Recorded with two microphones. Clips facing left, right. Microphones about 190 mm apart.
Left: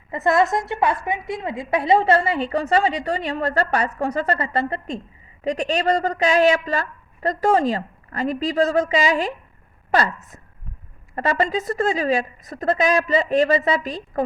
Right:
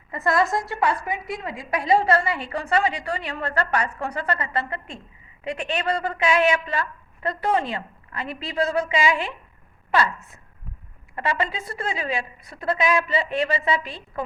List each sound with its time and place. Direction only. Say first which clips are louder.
0.1 s a woman's voice: left 3 dB; 25° left (ahead or behind); by 14.0 s 40° left (ahead or behind)